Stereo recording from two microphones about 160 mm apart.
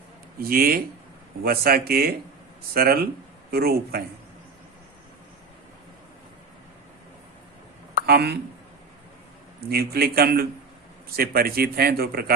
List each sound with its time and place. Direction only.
0.4 s a man's voice: 65° right (ahead or behind)
8.0 s speech: 85° right
9.6 s a man's voice: 75° right (ahead or behind)